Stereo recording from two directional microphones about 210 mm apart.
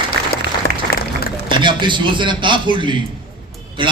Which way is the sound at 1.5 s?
20° right (ahead or behind).